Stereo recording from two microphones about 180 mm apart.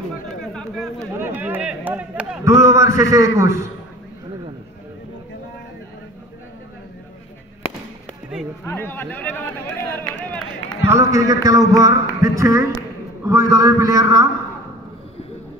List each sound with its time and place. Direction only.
0.4 s chatter: 5° left (ahead or behind)
1.2 s a man's voice: 10° right (ahead or behind)
8.6 s speech: 10° left (ahead or behind)
10.9 s a man's voice: 15° right (ahead or behind)